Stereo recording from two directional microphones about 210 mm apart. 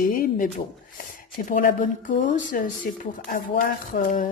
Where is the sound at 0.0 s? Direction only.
40° left (ahead or behind).